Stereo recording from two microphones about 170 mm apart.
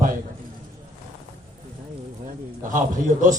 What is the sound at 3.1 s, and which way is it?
Speech, 45° right (ahead or behind).